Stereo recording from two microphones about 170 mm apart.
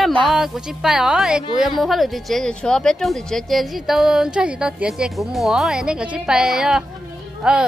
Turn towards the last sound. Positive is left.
turn(degrees=-5)  # may be behind; listen again after turning